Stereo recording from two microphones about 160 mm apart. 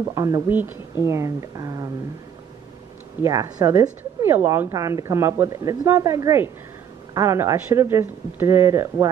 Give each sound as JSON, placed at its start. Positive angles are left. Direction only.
{"t": 0.0, "sound": "a woman's voice", "side_deg": -20}
{"t": 0.5, "sound": "a woman's voice", "side_deg": -10}
{"t": 3.2, "sound": "a woman's voice", "side_deg": -20}